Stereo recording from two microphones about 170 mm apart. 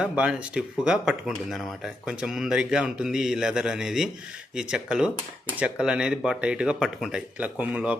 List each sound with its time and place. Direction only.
0.0 s speech: 5° right (ahead or behind)